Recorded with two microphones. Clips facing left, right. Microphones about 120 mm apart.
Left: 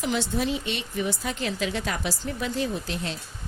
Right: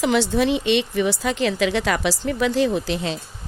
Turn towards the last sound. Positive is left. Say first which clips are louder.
# right 8 dB
turn(degrees=-90)